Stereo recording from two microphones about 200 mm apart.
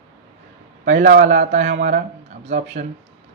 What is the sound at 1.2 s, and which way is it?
Speech, 35° right (ahead or behind).